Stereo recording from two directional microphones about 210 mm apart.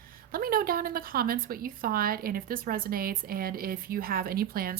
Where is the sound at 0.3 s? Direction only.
45° right (ahead or behind).